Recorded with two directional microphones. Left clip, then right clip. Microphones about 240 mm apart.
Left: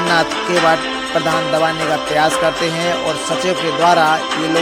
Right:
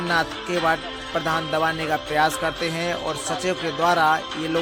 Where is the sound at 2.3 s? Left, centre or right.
Left.